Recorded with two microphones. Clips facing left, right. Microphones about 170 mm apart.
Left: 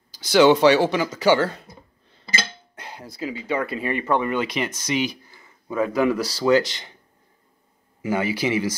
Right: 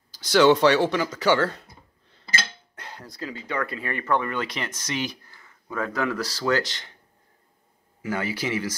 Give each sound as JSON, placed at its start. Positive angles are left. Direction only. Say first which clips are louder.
{"t": 0.1, "sound": "speech", "louder": "left 2 dB", "side_deg": 5}
{"t": 2.2, "sound": "a sound", "louder": "left 2 dB", "side_deg": 25}
{"t": 2.8, "sound": "speech", "louder": "left 5 dB", "side_deg": 5}
{"t": 3.4, "sound": "speech", "louder": "left 5 dB", "side_deg": 25}
{"t": 8.0, "sound": "speech", "louder": "left 5 dB", "side_deg": 15}